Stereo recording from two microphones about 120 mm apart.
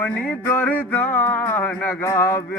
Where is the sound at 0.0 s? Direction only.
15° left (ahead or behind).